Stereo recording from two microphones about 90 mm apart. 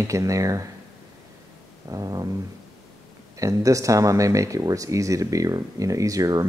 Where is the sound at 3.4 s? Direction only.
35° right (ahead or behind).